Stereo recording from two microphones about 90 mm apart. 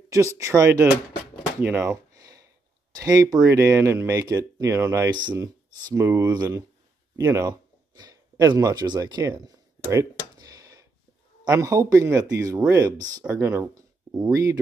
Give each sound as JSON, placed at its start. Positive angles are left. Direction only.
{"t": 0.1, "sound": "speech", "side_deg": -35}
{"t": 1.6, "sound": "speech", "side_deg": -20}
{"t": 2.1, "sound": "a sound", "side_deg": -40}
{"t": 3.0, "sound": "speech", "side_deg": -40}
{"t": 4.2, "sound": "speech", "side_deg": -40}
{"t": 7.9, "sound": "speech", "side_deg": -50}
{"t": 10.3, "sound": "a sound", "side_deg": -40}
{"t": 11.4, "sound": "speech", "side_deg": -40}
{"t": 13.3, "sound": "speech", "side_deg": -30}